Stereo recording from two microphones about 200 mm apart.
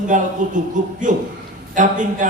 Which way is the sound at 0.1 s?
40° right (ahead or behind).